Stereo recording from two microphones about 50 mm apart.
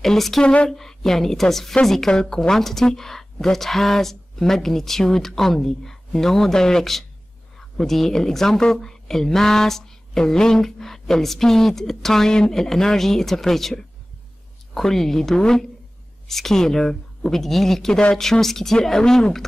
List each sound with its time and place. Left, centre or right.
0.0 s speech: centre
0.4 s speech: left
0.7 s a woman's voice: centre